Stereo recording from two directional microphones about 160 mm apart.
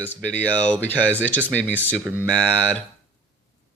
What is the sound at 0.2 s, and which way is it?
Speech, 10° left (ahead or behind).